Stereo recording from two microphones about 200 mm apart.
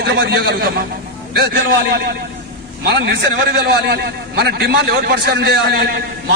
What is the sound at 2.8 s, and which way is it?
A man's voice, 60° right (ahead or behind).